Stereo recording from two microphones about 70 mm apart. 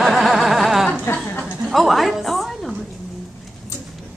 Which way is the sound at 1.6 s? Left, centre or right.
Centre.